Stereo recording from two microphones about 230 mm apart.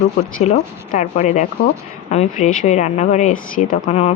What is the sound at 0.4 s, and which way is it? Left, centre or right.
Speech, left.